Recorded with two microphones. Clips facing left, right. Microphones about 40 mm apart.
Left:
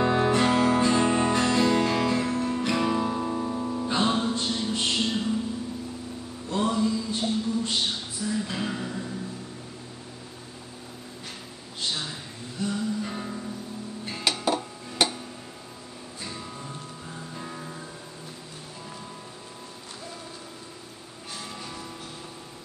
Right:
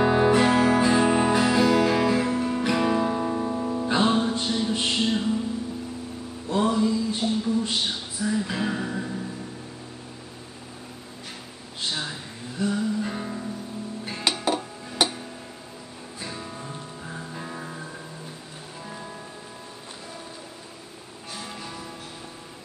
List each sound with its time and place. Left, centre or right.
0.0 s music: centre
6.5 s music: centre
11.9 s music: centre
16.2 s music: centre
21.4 s music: centre